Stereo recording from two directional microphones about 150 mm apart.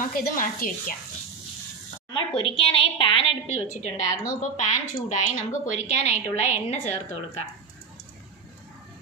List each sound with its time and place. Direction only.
0.1 s speech: 70° left (ahead or behind)
2.0 s a woman's voice: 35° left (ahead or behind); by 6.9 s 50° left (ahead or behind)